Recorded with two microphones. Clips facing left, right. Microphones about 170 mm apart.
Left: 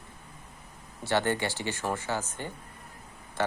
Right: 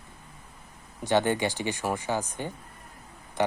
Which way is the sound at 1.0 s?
15° right (ahead or behind).